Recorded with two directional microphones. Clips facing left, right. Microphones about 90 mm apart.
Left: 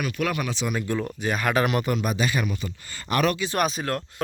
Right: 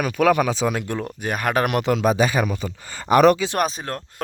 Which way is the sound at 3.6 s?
35° right (ahead or behind).